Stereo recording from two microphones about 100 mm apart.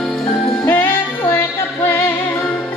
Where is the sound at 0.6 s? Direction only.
20° left (ahead or behind).